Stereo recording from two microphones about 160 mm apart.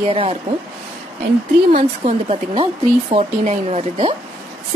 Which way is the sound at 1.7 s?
45° right (ahead or behind).